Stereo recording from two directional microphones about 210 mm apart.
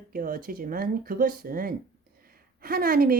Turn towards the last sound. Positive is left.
turn(degrees=-45)  # may be behind; listen again after turning